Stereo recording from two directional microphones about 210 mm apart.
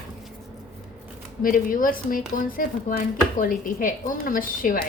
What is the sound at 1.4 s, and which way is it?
Speech, 40° left (ahead or behind).